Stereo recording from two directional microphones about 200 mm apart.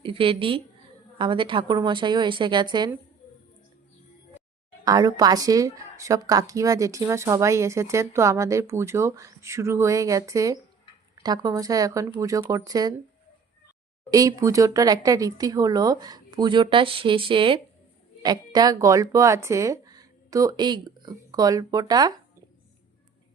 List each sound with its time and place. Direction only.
0.0 s speech: 25° right (ahead or behind)
4.9 s speech: 20° right (ahead or behind)
14.1 s speech: 15° right (ahead or behind)